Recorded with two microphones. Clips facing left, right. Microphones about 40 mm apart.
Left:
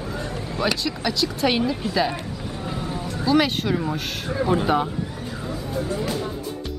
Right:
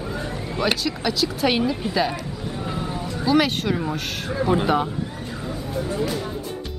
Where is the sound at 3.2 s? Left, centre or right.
Centre.